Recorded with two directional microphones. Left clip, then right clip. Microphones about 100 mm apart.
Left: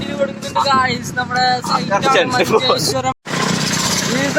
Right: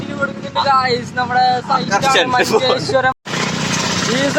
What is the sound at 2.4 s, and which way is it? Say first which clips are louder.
Speech: even; 25° right (ahead or behind).